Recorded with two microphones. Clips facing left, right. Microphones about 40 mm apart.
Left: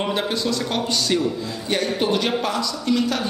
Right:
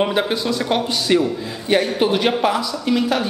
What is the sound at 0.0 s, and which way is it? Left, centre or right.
A man's voice, centre.